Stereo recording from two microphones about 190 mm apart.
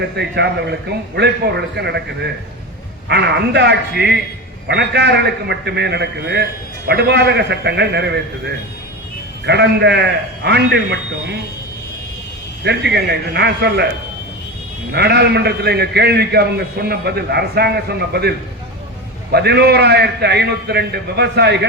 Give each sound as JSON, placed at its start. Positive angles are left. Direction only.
{"t": 0.0, "sound": "a man's voice", "side_deg": -60}
{"t": 12.6, "sound": "a man's voice", "side_deg": -60}
{"t": 14.9, "sound": "a man's voice", "side_deg": -60}